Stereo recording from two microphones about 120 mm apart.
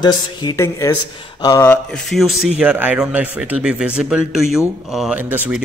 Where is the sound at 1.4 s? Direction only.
30° left (ahead or behind).